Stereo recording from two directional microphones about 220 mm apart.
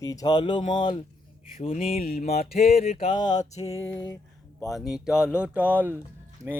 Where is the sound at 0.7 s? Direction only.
20° left (ahead or behind).